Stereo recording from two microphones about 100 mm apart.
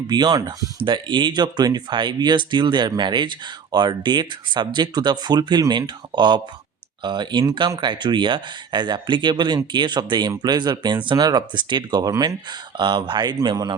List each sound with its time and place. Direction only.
0.1 s speech: 45° right (ahead or behind)
0.8 s speech: 55° right (ahead or behind); by 12.4 s 35° right (ahead or behind)
12.5 s speech: 50° right (ahead or behind)